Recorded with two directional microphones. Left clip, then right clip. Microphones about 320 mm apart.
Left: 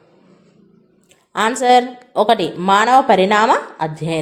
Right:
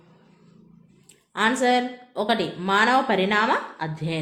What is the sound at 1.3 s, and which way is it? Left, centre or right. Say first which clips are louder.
Speech: left 8 dB; left.